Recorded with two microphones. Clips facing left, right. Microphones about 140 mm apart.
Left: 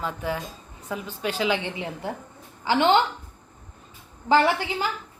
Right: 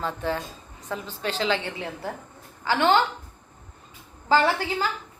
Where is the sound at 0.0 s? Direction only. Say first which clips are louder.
Right 1 dB; 10° left (ahead or behind).